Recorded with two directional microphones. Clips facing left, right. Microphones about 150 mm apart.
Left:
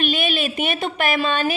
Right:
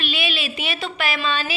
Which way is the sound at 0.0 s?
50° left (ahead or behind).